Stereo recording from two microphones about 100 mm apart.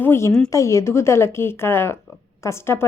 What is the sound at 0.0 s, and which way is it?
A woman's voice, 25° left (ahead or behind).